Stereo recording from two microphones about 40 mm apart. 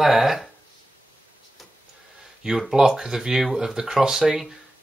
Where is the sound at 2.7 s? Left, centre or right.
Centre.